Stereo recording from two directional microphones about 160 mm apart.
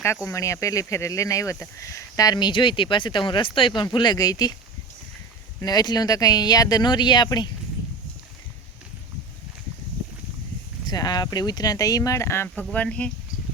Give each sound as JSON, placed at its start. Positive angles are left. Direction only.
{"t": 0.3, "sound": "speech", "side_deg": 20}
{"t": 5.5, "sound": "speech", "side_deg": 25}
{"t": 10.8, "sound": "speech", "side_deg": 25}